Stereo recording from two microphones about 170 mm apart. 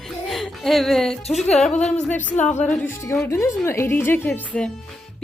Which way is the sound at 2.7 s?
15° left (ahead or behind).